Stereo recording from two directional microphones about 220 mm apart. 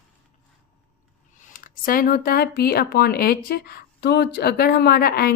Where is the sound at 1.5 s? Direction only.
40° left (ahead or behind).